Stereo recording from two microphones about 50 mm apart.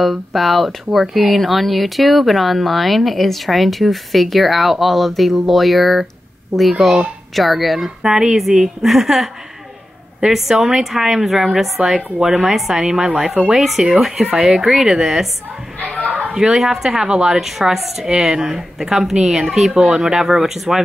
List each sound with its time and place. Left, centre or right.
0.0 s a woman's voice: centre
16.0 s a sound: right
16.3 s a woman's voice: centre